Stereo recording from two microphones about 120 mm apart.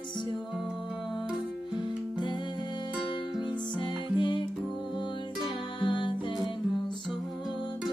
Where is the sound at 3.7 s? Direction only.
40° left (ahead or behind).